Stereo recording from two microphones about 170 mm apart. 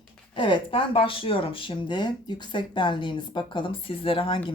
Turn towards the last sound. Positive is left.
turn(degrees=30)  # may be behind; listen again after turning